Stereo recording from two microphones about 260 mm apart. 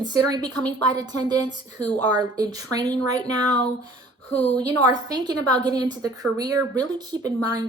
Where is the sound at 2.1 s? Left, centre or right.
Centre.